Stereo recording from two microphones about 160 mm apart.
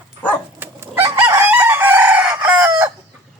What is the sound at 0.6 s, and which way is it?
Chicken, 15° right (ahead or behind).